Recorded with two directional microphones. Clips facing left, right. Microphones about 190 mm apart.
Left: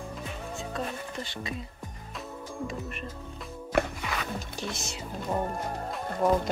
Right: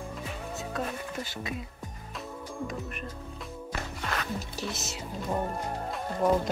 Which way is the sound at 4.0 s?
Centre (ahead or behind).